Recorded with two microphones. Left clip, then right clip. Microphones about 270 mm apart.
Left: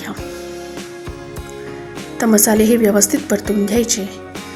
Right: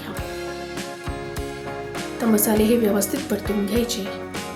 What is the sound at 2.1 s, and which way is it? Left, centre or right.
Speech, right.